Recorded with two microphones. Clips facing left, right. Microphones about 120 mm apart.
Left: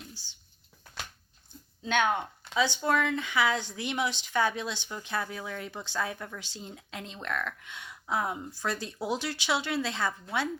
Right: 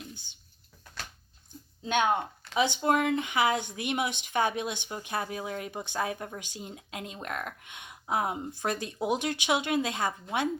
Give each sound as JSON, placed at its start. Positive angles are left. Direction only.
{"t": 0.0, "sound": "a sound", "side_deg": -20}
{"t": 1.8, "sound": "speech", "side_deg": -15}
{"t": 6.4, "sound": "speech", "side_deg": -15}